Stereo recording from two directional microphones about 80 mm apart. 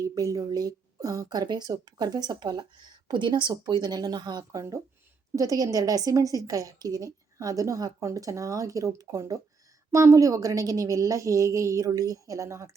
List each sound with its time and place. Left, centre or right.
0.0 s a woman's voice: right
3.7 s a woman's voice: right
5.4 s a woman's voice: right